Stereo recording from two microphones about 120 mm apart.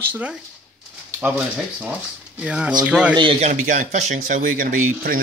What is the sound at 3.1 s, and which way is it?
Speech, 40° right (ahead or behind).